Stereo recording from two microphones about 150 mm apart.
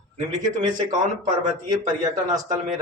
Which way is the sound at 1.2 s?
50° right (ahead or behind).